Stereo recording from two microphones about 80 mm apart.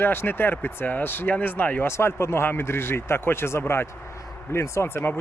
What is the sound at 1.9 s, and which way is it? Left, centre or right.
Speech, left.